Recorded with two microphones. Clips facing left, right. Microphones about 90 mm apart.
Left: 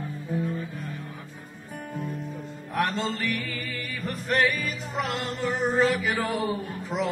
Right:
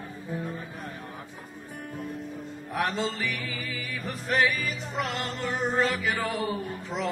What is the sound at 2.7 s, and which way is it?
Music, centre (ahead or behind).